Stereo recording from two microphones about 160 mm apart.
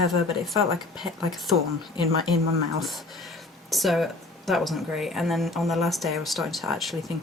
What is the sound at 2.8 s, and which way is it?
Speech, centre (ahead or behind).